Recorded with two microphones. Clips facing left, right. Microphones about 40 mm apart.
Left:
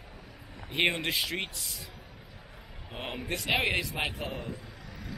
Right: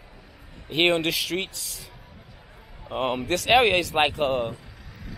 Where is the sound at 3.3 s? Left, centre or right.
Right.